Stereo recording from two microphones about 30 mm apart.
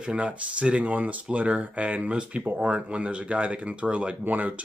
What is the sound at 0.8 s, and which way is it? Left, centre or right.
Speech, right.